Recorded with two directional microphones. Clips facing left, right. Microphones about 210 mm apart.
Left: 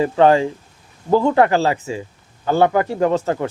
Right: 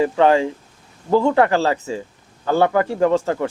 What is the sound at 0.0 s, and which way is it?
Speech, 30° left (ahead or behind).